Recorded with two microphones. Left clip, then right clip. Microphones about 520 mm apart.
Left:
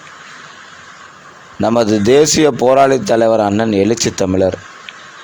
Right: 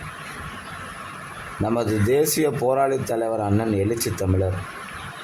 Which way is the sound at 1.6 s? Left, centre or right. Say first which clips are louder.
Left 10 dB; right.